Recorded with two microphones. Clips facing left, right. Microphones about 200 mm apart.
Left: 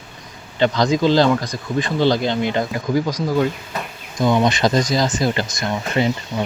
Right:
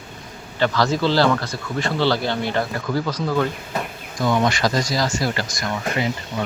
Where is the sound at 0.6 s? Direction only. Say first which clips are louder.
Left 3 dB; 20° left (ahead or behind).